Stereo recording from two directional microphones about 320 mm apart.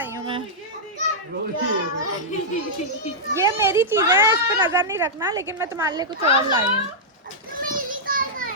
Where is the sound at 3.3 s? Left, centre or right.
Centre.